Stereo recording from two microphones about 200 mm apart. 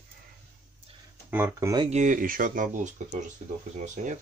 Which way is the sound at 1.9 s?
40° right (ahead or behind).